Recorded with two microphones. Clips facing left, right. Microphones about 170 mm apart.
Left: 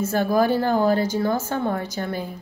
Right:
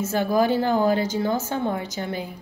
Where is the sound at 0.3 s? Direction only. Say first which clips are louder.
Left 1 dB; 45° left (ahead or behind).